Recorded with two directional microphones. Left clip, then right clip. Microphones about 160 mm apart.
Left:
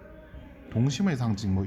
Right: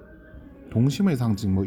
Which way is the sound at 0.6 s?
15° right (ahead or behind).